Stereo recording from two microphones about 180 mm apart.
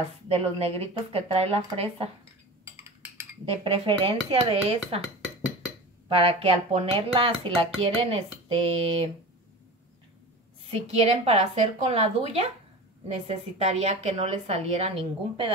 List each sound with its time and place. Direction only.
0.3 s a woman's voice: 35° right (ahead or behind)
3.4 s speech: 30° right (ahead or behind)
6.1 s a woman's voice: 30° right (ahead or behind)
10.7 s a woman's voice: 35° right (ahead or behind)